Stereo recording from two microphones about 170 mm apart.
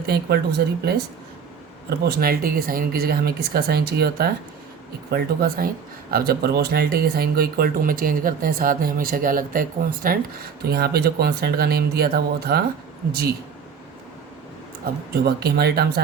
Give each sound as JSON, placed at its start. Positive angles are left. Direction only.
{"t": 0.1, "sound": "speech", "side_deg": -75}
{"t": 15.1, "sound": "speech", "side_deg": -70}